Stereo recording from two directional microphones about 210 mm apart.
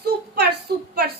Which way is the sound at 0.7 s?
50° right (ahead or behind).